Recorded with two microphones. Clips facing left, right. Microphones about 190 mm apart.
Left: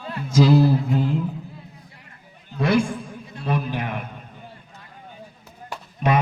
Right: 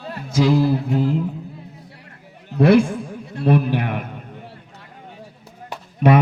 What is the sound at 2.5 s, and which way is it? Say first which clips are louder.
A man's voice: right 7 dB; 65° right (ahead or behind).